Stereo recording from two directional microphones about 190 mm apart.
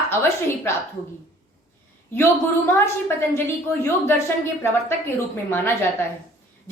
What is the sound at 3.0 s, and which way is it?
A woman's voice, 10° left (ahead or behind).